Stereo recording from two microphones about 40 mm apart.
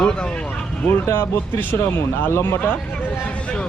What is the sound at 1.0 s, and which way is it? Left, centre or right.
Speech, left.